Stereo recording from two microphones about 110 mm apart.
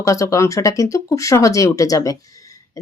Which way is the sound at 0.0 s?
30° left (ahead or behind).